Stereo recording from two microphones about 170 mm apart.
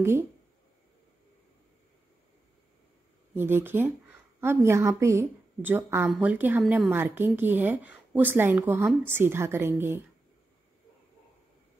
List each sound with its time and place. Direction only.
3.3 s a woman's voice: 10° right (ahead or behind)
6.9 s speech: 10° right (ahead or behind)